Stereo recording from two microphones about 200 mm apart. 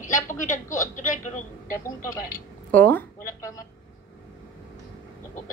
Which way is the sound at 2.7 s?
10° left (ahead or behind).